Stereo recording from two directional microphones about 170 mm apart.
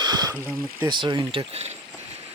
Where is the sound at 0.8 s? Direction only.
25° right (ahead or behind).